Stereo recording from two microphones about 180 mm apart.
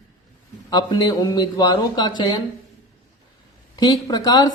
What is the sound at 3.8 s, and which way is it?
Speech, 20° left (ahead or behind).